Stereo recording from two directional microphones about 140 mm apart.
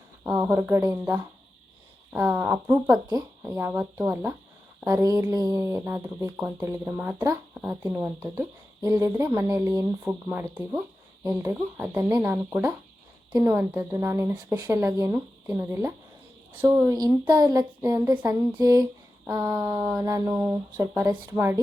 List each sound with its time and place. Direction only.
0.3 s speech: 15° right (ahead or behind)
4.9 s speech: 20° right (ahead or behind)
18.6 s a sound: 25° right (ahead or behind)
20.1 s speech: 25° right (ahead or behind)